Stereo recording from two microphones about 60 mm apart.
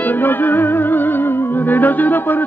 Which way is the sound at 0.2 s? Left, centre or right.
Left.